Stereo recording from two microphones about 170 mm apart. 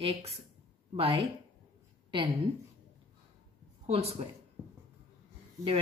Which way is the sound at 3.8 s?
35° right (ahead or behind).